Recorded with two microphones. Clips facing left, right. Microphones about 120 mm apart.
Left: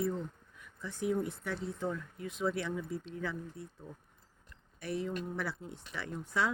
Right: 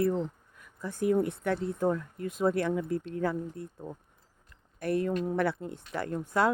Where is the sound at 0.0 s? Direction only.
70° right (ahead or behind).